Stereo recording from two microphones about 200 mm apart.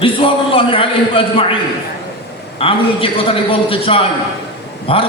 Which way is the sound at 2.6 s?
25° left (ahead or behind).